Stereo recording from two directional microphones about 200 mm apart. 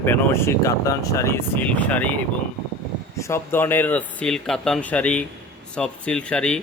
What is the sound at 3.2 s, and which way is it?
Speech, 10° left (ahead or behind).